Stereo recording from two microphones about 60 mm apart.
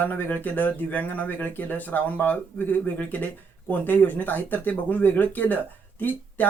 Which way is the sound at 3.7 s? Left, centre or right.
Left.